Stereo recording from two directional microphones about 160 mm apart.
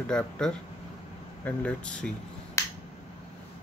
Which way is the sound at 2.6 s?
20° left (ahead or behind).